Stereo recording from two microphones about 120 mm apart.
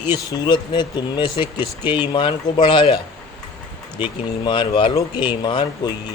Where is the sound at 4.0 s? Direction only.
40° left (ahead or behind).